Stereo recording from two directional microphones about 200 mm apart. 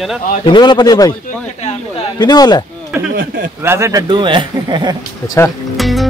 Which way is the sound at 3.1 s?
45° right (ahead or behind).